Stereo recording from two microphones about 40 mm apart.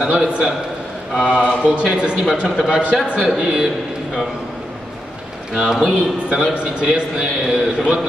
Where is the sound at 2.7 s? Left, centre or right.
Right.